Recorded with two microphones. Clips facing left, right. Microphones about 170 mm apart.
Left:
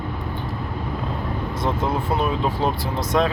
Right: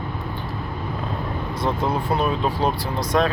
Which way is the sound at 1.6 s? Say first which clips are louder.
Right 1 dB; 20° left (ahead or behind).